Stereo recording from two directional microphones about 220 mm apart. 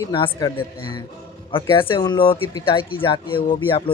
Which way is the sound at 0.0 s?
20° left (ahead or behind).